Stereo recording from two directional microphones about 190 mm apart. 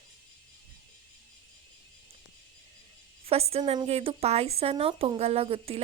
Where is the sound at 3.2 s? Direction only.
30° right (ahead or behind).